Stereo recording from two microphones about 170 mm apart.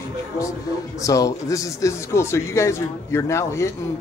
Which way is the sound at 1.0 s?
20° left (ahead or behind).